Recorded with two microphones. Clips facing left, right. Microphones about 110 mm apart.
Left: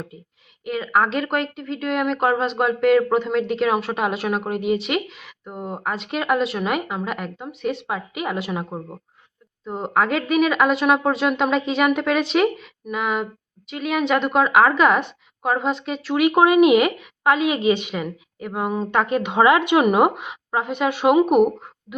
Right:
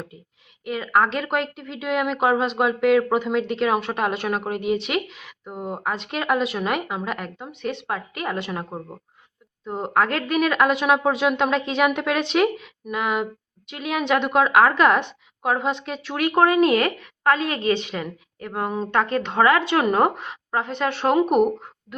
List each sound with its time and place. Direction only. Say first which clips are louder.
0.6 s a woman's voice: even; centre (ahead or behind)